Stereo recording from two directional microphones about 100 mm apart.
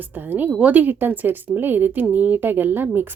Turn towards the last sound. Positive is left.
turn(degrees=-20)  # may be behind; listen again after turning